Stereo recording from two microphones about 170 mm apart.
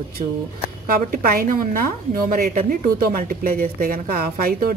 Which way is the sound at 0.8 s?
60° right (ahead or behind).